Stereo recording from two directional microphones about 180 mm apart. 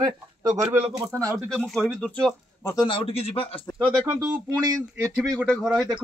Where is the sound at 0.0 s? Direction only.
20° right (ahead or behind).